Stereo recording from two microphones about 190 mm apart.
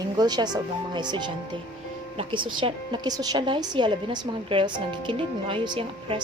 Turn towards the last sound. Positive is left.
turn(degrees=-25)  # may be behind; listen again after turning